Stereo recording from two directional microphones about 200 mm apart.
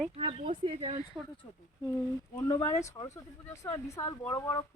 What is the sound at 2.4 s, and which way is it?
Speech, 15° left (ahead or behind).